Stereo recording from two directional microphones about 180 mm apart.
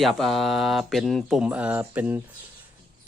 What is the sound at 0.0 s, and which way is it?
Speech, centre (ahead or behind).